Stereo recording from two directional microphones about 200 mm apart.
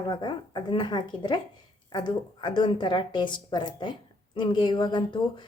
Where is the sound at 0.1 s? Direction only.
20° left (ahead or behind).